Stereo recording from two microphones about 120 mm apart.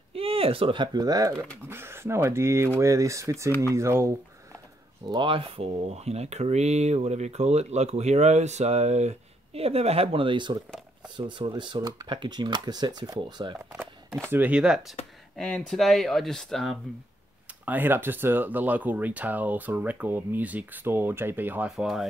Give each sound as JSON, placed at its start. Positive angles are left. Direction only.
{"t": 0.1, "sound": "speech", "side_deg": -50}
{"t": 1.7, "sound": "speech", "side_deg": -20}
{"t": 5.1, "sound": "speech", "side_deg": -45}
{"t": 14.3, "sound": "speech", "side_deg": -10}
{"t": 15.3, "sound": "speech", "side_deg": 5}
{"t": 17.6, "sound": "speech", "side_deg": -15}
{"t": 21.7, "sound": "speech", "side_deg": 0}